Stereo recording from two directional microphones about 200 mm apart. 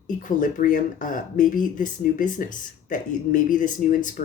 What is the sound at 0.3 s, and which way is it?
Speech, 40° left (ahead or behind).